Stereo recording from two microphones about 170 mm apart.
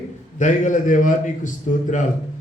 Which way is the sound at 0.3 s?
45° left (ahead or behind).